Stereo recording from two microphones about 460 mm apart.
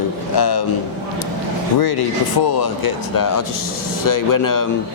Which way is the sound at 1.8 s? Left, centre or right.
Left.